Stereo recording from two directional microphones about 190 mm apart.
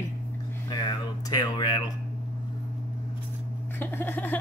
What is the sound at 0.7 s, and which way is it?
Speech, 20° left (ahead or behind).